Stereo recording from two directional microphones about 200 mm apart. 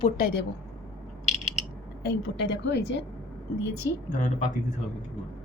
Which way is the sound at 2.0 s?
60° left (ahead or behind).